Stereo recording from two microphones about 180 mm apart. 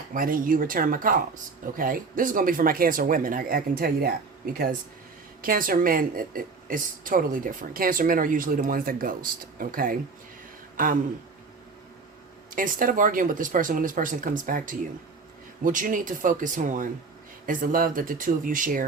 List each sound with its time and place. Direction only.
0.1 s a woman's voice: 50° right (ahead or behind)
5.4 s a woman's voice: 50° right (ahead or behind)
12.5 s a woman's voice: 50° right (ahead or behind)